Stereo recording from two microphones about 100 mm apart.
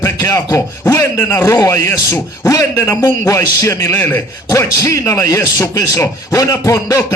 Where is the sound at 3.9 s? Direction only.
20° left (ahead or behind).